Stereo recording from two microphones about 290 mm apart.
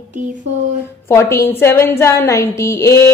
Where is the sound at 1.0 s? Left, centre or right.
Centre.